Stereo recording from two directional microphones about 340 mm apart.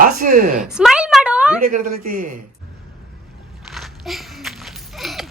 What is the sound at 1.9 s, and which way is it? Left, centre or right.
Speech, right.